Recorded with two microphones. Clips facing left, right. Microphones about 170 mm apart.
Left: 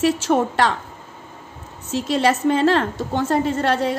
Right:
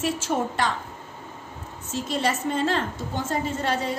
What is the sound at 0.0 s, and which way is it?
Speech, 80° left.